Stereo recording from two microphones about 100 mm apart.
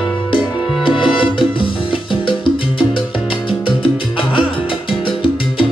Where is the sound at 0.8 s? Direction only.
60° left (ahead or behind).